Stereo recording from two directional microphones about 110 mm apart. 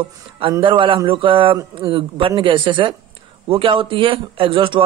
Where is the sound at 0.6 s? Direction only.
50° right (ahead or behind).